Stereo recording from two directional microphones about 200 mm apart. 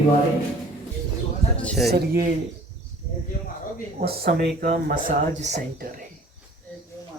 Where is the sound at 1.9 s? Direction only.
55° right (ahead or behind).